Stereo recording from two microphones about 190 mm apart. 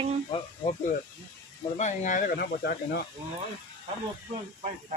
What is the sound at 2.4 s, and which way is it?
Speech, 55° left (ahead or behind).